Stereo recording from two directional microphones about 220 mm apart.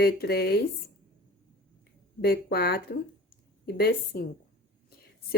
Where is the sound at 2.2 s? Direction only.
45° left (ahead or behind).